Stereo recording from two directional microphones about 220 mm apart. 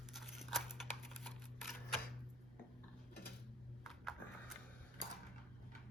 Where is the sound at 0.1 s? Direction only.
Centre (ahead or behind).